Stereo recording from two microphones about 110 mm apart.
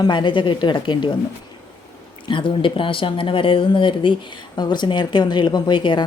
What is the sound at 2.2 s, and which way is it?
Speech, 50° left (ahead or behind).